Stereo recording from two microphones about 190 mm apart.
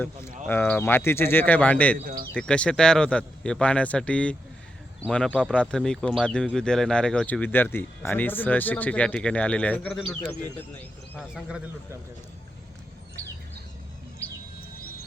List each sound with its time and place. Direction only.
0.4 s speech: 10° left (ahead or behind)
11.2 s speech: 5° right (ahead or behind)
13.2 s bird: 15° right (ahead or behind)